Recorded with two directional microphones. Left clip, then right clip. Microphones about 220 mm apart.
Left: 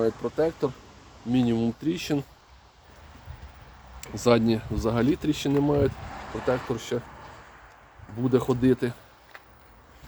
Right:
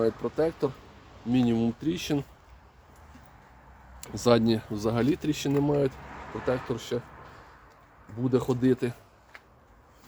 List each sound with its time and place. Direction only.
0.0 s speech: 10° right (ahead or behind)
4.0 s speech: 15° right (ahead or behind)
6.1 s vehicle: 55° left (ahead or behind)
6.7 s speech: centre (ahead or behind)
8.2 s speech: 5° left (ahead or behind)